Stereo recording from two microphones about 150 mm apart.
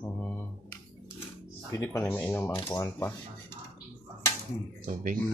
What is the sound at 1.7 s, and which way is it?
Speech, 20° left (ahead or behind).